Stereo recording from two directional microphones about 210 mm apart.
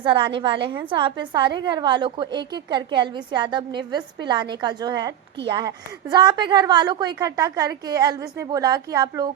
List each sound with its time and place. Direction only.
0.0 s a woman's voice: 25° right (ahead or behind)